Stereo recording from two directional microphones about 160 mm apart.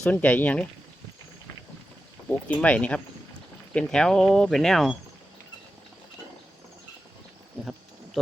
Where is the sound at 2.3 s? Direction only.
10° left (ahead or behind).